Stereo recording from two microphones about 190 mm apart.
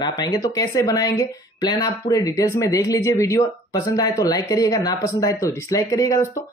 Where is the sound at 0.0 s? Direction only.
20° left (ahead or behind).